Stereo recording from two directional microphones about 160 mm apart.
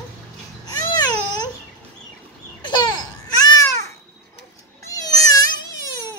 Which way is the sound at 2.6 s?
30° left (ahead or behind).